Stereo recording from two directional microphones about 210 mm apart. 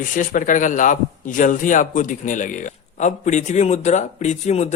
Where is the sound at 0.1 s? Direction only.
40° left (ahead or behind).